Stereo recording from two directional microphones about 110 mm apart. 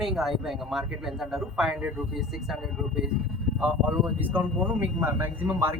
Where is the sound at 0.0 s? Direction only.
5° right (ahead or behind).